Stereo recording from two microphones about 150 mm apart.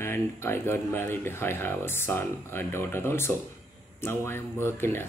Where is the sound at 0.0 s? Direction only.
15° left (ahead or behind).